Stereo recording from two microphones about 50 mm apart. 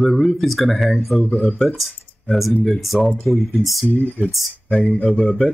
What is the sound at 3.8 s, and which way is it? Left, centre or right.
Speech, left.